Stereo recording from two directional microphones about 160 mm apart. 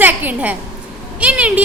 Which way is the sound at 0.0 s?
10° right (ahead or behind).